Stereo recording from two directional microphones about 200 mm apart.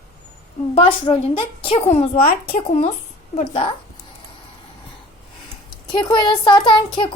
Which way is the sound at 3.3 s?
30° left (ahead or behind).